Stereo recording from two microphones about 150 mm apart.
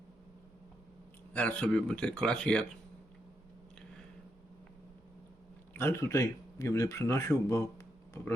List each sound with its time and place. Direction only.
1.3 s a man's voice: 10° left (ahead or behind)
5.7 s speech: 15° left (ahead or behind)